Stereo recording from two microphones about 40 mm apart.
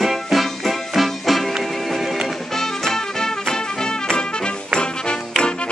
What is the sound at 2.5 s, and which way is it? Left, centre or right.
Music, centre.